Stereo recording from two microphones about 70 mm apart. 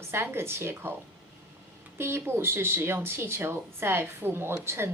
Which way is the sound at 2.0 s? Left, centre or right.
Right.